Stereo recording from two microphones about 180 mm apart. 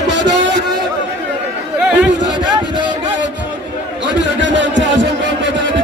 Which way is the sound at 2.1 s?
80° right.